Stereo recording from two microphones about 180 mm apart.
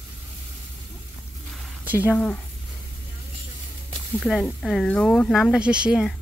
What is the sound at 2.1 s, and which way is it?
Speech, 10° left (ahead or behind).